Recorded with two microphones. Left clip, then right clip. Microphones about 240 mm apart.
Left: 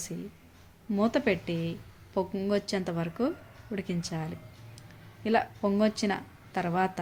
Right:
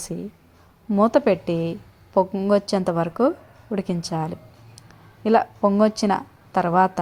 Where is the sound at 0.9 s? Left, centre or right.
Right.